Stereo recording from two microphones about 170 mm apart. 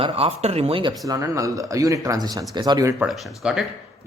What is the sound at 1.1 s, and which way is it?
Speech, 20° right (ahead or behind).